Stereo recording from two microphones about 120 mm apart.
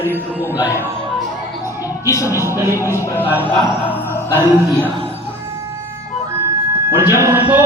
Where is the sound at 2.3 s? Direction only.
20° right (ahead or behind).